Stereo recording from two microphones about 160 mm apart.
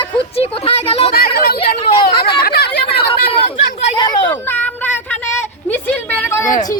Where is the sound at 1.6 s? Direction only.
35° left (ahead or behind).